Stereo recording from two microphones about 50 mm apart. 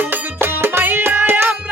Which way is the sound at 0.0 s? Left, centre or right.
Right.